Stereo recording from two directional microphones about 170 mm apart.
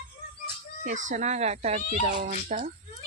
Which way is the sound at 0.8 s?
45° right (ahead or behind).